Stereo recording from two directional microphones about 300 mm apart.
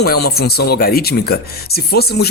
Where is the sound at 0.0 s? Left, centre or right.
Left.